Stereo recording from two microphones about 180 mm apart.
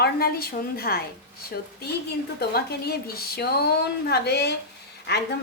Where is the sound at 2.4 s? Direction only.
60° left (ahead or behind).